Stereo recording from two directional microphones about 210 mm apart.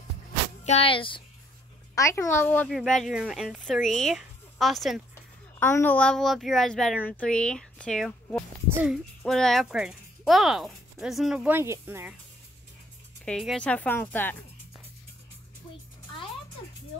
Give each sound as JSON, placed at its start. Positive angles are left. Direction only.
{"t": 0.7, "sound": "speech", "side_deg": 25}
{"t": 2.0, "sound": "a woman's voice", "side_deg": 15}
{"t": 5.6, "sound": "a woman's voice", "side_deg": 10}
{"t": 13.2, "sound": "a woman's voice", "side_deg": 0}